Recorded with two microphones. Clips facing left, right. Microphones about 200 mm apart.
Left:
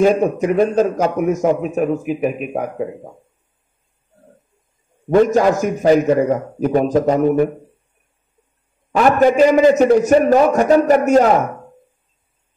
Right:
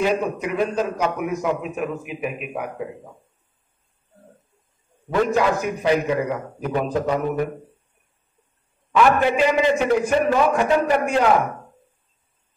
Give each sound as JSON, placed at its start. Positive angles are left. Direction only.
{"t": 0.0, "sound": "a man's voice", "side_deg": 45}
{"t": 5.1, "sound": "a man's voice", "side_deg": 45}
{"t": 8.9, "sound": "a man's voice", "side_deg": 45}